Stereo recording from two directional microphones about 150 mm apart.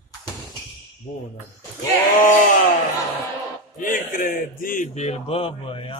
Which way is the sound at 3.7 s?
65° left (ahead or behind).